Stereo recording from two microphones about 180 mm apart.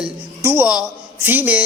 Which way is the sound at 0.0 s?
10° right (ahead or behind).